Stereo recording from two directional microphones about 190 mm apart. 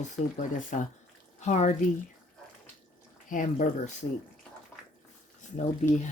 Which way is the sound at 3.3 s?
45° left (ahead or behind).